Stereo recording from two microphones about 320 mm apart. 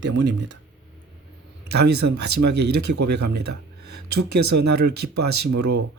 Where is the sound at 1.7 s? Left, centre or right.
Right.